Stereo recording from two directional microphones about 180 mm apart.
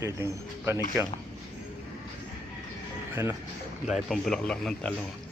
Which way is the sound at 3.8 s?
Centre (ahead or behind).